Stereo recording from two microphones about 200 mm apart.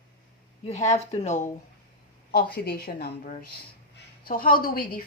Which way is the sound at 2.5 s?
50° left (ahead or behind).